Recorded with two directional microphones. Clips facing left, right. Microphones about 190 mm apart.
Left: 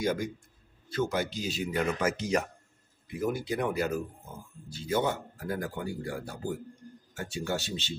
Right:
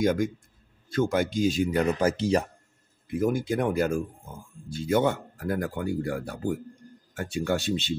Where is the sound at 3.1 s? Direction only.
50° right (ahead or behind).